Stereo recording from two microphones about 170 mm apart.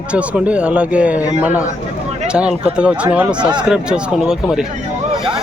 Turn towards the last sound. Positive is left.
turn(degrees=-5)  # may be behind; listen again after turning